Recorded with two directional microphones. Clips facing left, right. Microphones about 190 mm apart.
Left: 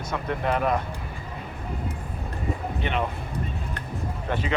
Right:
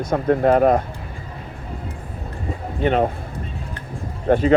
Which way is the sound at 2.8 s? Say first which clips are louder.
Right 10 dB; 45° right (ahead or behind).